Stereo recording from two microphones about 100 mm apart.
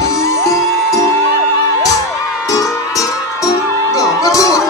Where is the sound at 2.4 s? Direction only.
35° left (ahead or behind).